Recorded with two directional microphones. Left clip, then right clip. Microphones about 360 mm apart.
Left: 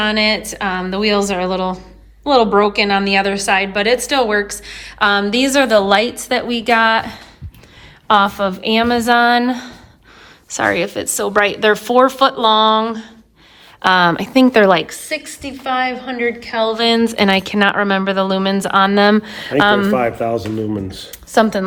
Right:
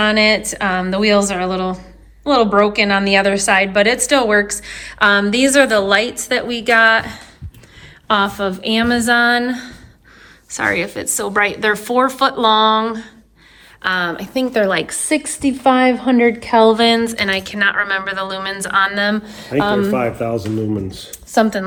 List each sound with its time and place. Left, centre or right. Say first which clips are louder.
0.0 s a woman's voice: right 2 dB; centre
14.8 s a woman's voice: right 2 dB; centre; by 21.6 s left